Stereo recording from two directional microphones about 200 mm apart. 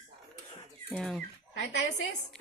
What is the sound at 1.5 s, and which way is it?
Speech, 60° left (ahead or behind).